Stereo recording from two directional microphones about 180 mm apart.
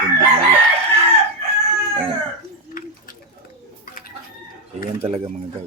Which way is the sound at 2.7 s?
50° left (ahead or behind).